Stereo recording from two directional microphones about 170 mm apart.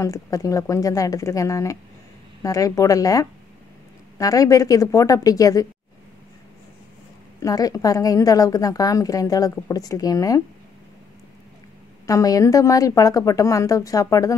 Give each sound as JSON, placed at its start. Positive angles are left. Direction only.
{"t": 0.0, "sound": "a woman's voice", "side_deg": 20}
{"t": 7.4, "sound": "a woman's voice", "side_deg": 20}
{"t": 12.1, "sound": "a woman's voice", "side_deg": 20}